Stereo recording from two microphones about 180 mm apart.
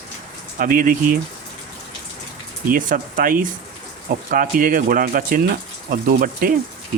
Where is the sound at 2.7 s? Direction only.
50° right (ahead or behind).